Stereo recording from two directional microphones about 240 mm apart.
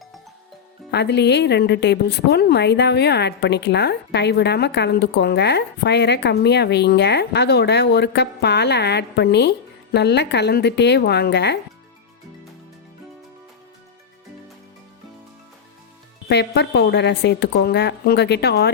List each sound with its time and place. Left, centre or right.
0.9 s a woman's voice: left
16.3 s a woman's voice: left